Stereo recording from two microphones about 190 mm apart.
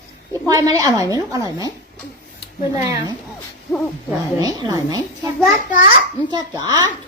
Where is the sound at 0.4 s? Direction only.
20° right (ahead or behind).